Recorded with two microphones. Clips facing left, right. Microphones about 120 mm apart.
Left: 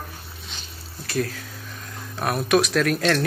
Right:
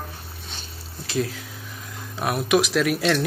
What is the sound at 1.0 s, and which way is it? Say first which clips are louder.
Speech: even; 20° right (ahead or behind).